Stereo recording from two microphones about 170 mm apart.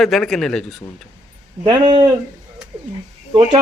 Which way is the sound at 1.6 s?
25° right (ahead or behind).